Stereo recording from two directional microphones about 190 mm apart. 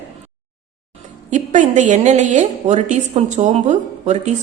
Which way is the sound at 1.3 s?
40° right (ahead or behind).